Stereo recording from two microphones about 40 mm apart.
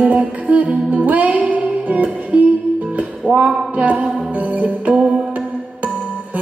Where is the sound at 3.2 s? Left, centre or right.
Right.